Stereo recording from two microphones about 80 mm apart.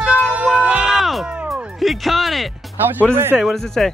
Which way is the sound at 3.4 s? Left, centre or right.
Centre.